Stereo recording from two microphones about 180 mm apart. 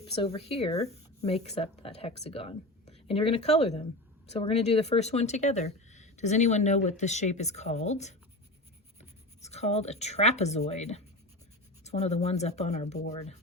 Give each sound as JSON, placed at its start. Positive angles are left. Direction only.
{"t": 0.0, "sound": "speech", "side_deg": 30}